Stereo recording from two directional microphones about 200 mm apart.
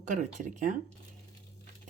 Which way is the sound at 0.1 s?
40° right (ahead or behind).